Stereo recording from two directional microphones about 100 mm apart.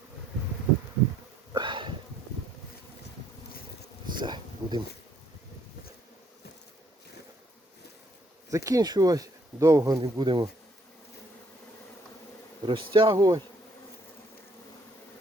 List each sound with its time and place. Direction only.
1.5 s a sound: 50° right (ahead or behind)
4.0 s bee: 50° right (ahead or behind)
8.4 s speech: 35° right (ahead or behind)
10.0 s speech: 50° right (ahead or behind)
12.6 s bee: 55° right (ahead or behind)
13.1 s speech: 35° right (ahead or behind)